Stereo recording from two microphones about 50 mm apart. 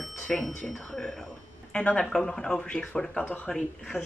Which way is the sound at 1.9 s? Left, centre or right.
Centre.